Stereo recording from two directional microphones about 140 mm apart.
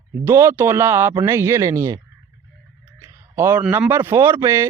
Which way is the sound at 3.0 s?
20° right (ahead or behind).